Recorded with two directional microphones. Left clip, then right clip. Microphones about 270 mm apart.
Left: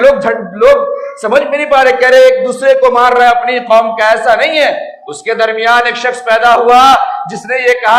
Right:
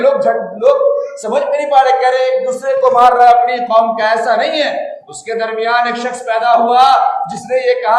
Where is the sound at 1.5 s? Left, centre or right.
Left.